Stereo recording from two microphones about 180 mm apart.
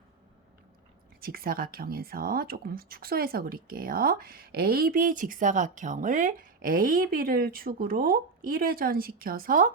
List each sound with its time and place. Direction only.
1.2 s speech: 55° right (ahead or behind)